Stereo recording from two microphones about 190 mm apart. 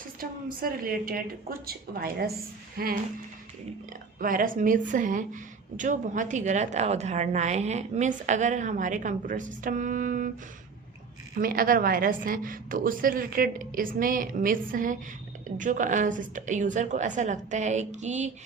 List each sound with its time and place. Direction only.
0.2 s a woman's voice: 50° right (ahead or behind)
4.2 s a woman's voice: 45° right (ahead or behind)
11.3 s a woman's voice: 50° right (ahead or behind)